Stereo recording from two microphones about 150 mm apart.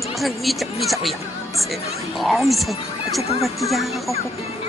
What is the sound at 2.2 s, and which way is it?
Speech, centre (ahead or behind).